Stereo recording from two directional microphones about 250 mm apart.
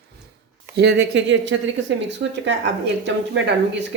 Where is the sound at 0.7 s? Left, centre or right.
Right.